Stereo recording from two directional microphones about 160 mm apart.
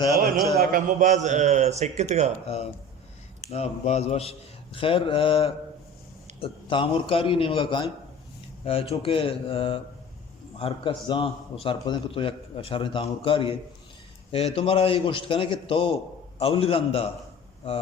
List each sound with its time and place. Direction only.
0.7 s a man's voice: 55° right (ahead or behind)
3.5 s a man's voice: 40° left (ahead or behind)